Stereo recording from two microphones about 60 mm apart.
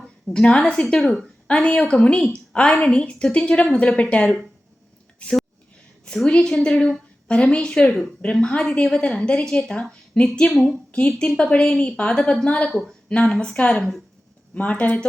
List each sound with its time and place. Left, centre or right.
0.3 s a woman's voice: centre
10.5 s speech: centre
11.3 s a woman's voice: centre